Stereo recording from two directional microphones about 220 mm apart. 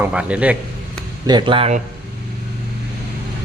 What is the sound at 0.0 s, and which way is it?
Speech, 5° right (ahead or behind).